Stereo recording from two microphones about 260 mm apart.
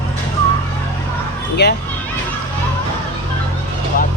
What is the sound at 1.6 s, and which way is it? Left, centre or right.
Speech, left.